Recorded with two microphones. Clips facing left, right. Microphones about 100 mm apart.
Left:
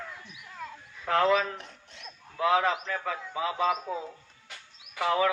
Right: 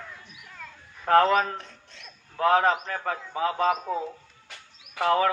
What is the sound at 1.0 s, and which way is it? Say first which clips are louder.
Speech: right 4 dB; 50° right (ahead or behind).